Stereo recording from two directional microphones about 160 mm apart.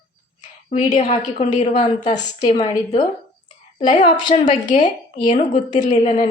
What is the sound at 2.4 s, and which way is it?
A woman's voice, 45° left (ahead or behind).